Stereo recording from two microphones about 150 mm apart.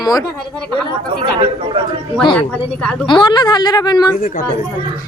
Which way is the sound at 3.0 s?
35° left (ahead or behind).